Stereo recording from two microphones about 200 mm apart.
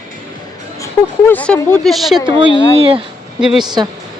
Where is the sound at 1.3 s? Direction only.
10° left (ahead or behind).